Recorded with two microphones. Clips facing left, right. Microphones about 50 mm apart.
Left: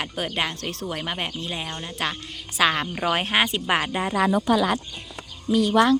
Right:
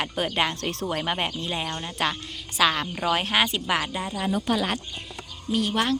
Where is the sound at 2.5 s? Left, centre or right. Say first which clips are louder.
Left 1 dB; centre.